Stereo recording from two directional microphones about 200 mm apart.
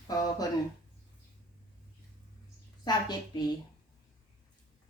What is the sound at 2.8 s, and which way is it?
Speech, 20° left (ahead or behind).